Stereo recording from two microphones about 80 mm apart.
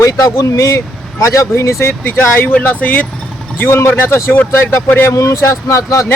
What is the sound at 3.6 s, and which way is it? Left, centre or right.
Speech, left.